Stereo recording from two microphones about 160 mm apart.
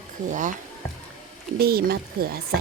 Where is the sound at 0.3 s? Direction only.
50° right (ahead or behind).